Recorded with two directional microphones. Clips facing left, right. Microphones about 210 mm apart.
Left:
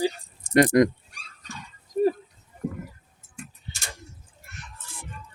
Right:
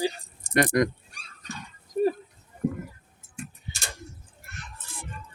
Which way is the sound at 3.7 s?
10° right (ahead or behind).